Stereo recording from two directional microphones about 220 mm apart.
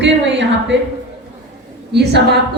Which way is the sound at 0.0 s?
55° right (ahead or behind).